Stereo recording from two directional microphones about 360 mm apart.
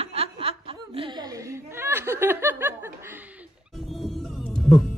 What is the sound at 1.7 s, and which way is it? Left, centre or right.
Speech, centre.